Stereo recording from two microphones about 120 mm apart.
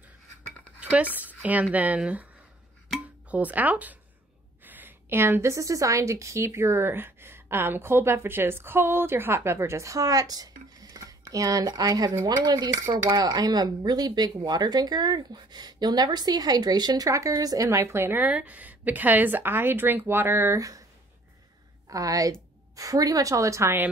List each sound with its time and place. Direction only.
0.7 s dishes: 10° right (ahead or behind)
1.1 s speech: 15° right (ahead or behind)
3.3 s a woman's voice: 15° right (ahead or behind)
21.8 s a woman's voice: 30° right (ahead or behind)